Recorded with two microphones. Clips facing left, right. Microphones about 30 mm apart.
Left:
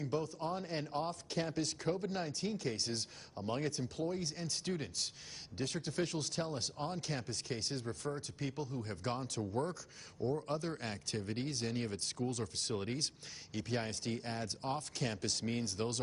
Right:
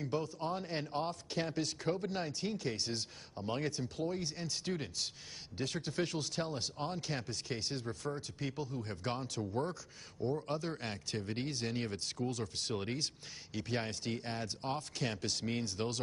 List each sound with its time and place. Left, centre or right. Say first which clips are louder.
0.0 s a man's voice: right 1 dB; centre
12.0 s speech: right 1 dB; centre